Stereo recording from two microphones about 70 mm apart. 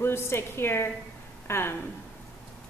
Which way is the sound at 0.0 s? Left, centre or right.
Left.